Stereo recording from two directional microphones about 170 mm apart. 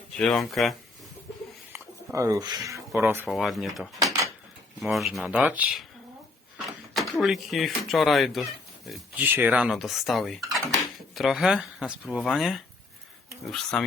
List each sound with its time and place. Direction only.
0.2 s speech: centre (ahead or behind)
2.1 s speech: 20° right (ahead or behind)
3.2 s speech: centre (ahead or behind)